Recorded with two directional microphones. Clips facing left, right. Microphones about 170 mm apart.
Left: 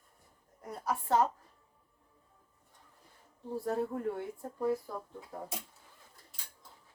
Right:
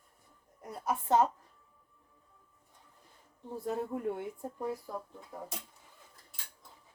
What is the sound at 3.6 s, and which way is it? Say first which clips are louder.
Speech: even; 20° right (ahead or behind).